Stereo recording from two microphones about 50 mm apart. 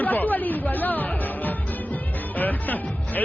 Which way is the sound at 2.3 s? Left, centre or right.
Left.